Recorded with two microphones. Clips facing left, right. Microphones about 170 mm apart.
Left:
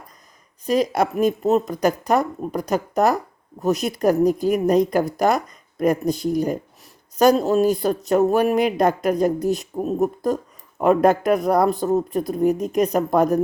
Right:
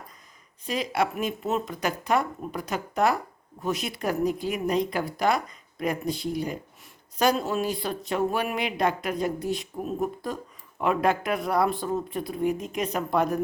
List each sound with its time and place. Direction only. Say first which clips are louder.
0.6 s a woman's voice: left 7 dB; 40° left (ahead or behind)